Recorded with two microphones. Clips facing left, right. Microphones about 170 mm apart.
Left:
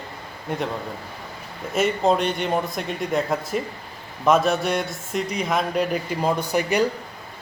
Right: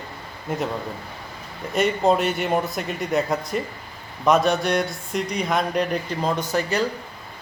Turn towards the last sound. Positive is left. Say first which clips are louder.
# left 2 dB
turn(degrees=15)  # may be behind; listen again after turning